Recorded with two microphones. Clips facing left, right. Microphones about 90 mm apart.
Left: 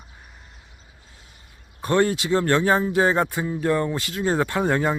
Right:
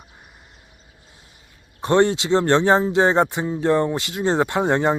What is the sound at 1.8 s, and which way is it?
Speech, 25° right (ahead or behind).